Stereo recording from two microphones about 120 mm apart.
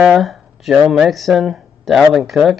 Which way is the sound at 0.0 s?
Centre (ahead or behind).